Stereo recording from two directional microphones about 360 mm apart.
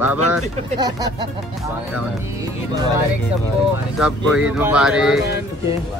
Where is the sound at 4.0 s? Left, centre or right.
Centre.